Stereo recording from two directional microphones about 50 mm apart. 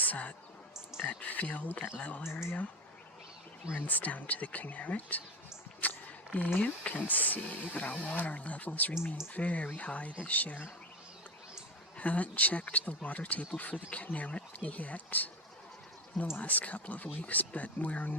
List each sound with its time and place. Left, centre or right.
0.0 s speech: left
3.7 s speech: left
5.8 s a sound: left
6.6 s speech: left
11.9 s speech: left
16.4 s speech: left